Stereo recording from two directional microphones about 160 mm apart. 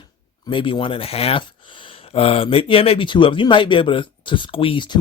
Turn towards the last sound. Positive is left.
turn(degrees=30)  # may be behind; listen again after turning